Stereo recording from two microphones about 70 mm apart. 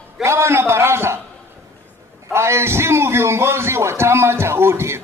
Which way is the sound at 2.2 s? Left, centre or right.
Right.